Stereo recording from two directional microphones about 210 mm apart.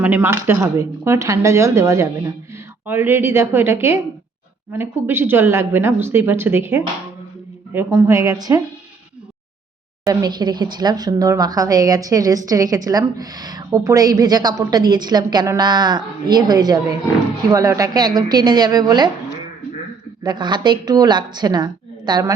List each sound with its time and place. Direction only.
0.0 s a woman's voice: 10° right (ahead or behind)
10.0 s a woman's voice: 15° right (ahead or behind)
20.2 s a woman's voice: 20° right (ahead or behind)